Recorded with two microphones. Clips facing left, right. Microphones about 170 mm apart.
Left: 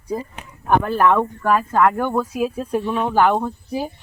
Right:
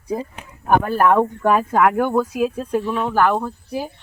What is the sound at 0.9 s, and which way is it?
Speech, 10° right (ahead or behind).